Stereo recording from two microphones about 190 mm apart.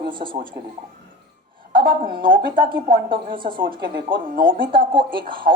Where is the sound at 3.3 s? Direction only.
25° right (ahead or behind).